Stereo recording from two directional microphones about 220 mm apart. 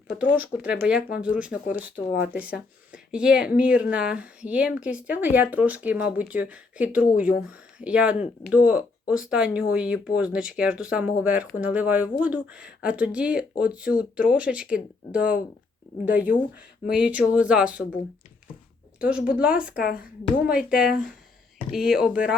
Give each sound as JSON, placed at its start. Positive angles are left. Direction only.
{"t": 0.1, "sound": "speech", "side_deg": -5}
{"t": 18.9, "sound": "a woman's voice", "side_deg": -5}